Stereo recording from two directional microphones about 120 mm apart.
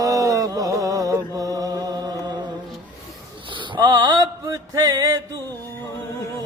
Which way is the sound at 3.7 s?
35° right (ahead or behind).